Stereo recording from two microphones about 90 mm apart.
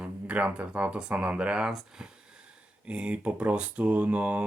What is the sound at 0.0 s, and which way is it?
Speech, 15° right (ahead or behind).